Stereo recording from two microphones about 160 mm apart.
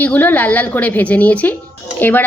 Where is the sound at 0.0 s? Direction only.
10° left (ahead or behind).